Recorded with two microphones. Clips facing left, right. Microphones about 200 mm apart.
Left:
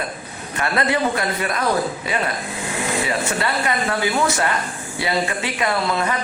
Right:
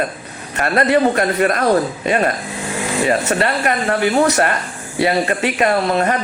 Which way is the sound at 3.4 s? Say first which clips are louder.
Right 4 dB; 60° right (ahead or behind).